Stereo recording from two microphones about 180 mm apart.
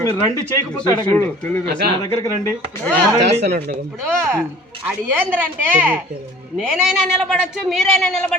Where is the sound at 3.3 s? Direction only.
35° right (ahead or behind).